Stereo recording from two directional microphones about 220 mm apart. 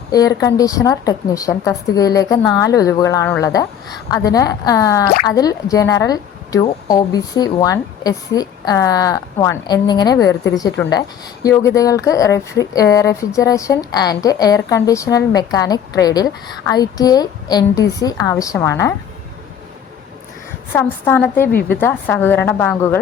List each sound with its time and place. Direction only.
0.1 s speech: 15° left (ahead or behind)
20.7 s speech: 10° left (ahead or behind)